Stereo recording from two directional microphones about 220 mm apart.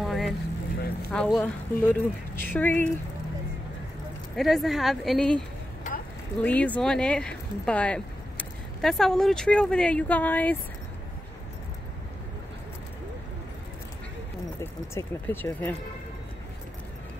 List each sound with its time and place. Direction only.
0.0 s vehicle: centre (ahead or behind)
1.1 s a woman's voice: 5° left (ahead or behind)
4.4 s speech: centre (ahead or behind)
5.9 s a sound: 35° left (ahead or behind)
6.4 s speech: 5° left (ahead or behind)
14.6 s a woman's voice: 10° left (ahead or behind)